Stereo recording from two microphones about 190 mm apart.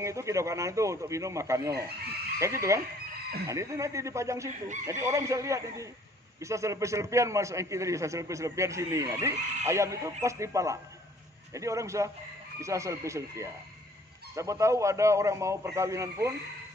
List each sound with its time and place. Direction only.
0.0 s a man's voice: 15° right (ahead or behind)